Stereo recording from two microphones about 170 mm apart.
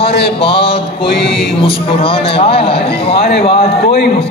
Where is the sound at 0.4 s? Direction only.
30° left (ahead or behind).